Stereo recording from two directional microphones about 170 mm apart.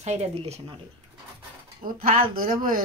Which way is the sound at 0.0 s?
40° right (ahead or behind).